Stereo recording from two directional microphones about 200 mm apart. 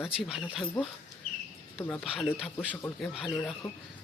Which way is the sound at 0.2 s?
Centre (ahead or behind).